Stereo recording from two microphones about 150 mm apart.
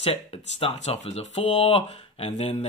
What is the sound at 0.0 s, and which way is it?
Speech, 40° left (ahead or behind).